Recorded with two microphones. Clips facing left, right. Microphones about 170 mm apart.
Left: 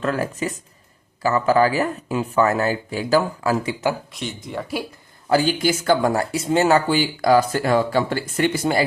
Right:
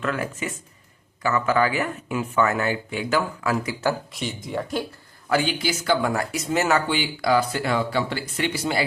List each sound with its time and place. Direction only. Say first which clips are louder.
0.0 s speech: left 4 dB; 35° left (ahead or behind)
4.1 s speech: right 1 dB; centre (ahead or behind)
5.3 s speech: left 5 dB; 40° left (ahead or behind)